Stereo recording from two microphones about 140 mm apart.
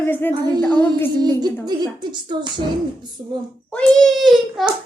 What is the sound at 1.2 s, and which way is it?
Speech, 30° right (ahead or behind).